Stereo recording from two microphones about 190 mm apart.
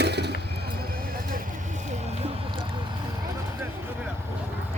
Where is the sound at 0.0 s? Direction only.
60° right (ahead or behind).